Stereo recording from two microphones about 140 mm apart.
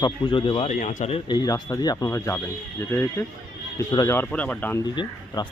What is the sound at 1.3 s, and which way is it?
Speech, 30° left (ahead or behind).